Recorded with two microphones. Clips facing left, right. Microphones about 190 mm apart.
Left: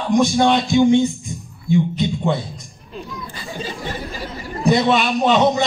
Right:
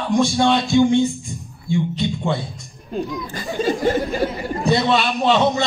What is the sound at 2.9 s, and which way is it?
Speech, 45° right (ahead or behind).